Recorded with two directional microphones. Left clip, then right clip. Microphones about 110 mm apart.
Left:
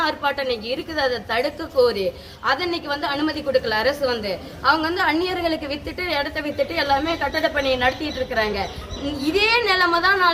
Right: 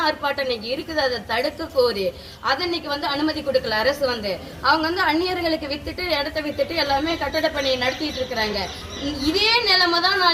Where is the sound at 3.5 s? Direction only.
35° left (ahead or behind).